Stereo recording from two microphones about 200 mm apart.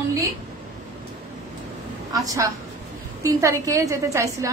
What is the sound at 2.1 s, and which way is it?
A woman's voice, 15° right (ahead or behind).